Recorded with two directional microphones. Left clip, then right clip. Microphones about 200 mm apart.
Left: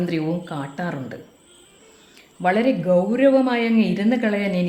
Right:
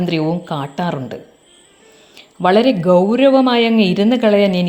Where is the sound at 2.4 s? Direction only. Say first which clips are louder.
Right 7 dB; 35° right (ahead or behind).